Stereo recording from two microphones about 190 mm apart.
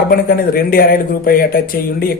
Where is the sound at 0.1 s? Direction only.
50° left (ahead or behind).